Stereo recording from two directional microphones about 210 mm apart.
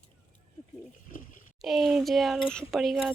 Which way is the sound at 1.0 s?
40° left (ahead or behind).